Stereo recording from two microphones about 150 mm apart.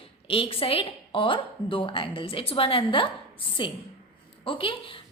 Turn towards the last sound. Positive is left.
turn(degrees=35)  # may be behind; listen again after turning